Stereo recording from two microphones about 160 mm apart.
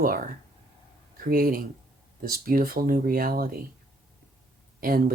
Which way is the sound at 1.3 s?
65° right (ahead or behind).